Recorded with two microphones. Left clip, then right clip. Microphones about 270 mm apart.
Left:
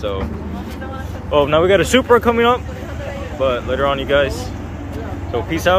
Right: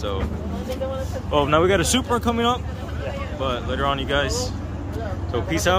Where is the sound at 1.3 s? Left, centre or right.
Centre.